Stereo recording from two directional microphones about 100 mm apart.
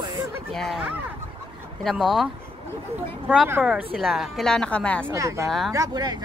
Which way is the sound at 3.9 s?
Centre (ahead or behind).